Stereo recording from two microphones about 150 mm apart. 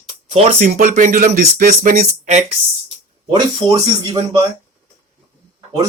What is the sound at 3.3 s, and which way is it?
Speech, 25° right (ahead or behind).